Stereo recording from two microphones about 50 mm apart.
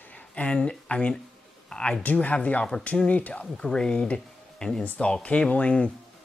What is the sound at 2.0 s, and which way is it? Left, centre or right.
Speech, left.